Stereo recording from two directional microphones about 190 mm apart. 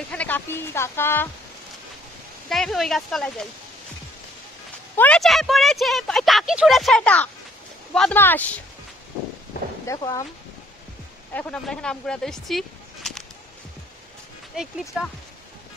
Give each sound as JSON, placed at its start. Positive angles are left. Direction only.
{"t": 0.1, "sound": "speech", "side_deg": 10}
{"t": 2.5, "sound": "speech", "side_deg": 0}
{"t": 4.9, "sound": "speech", "side_deg": 5}
{"t": 9.8, "sound": "speech", "side_deg": 15}
{"t": 11.3, "sound": "speech", "side_deg": 5}